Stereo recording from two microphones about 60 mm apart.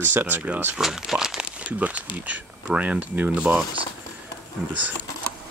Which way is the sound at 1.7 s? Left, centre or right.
Right.